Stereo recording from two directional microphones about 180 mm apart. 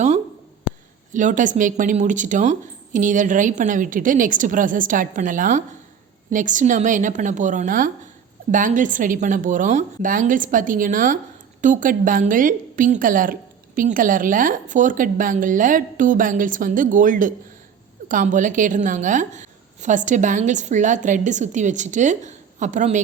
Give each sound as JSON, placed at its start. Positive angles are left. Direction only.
{"t": 1.1, "sound": "a woman's voice", "side_deg": -45}